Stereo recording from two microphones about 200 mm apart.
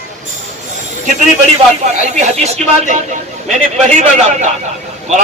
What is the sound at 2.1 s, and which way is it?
A man's voice, 35° right (ahead or behind).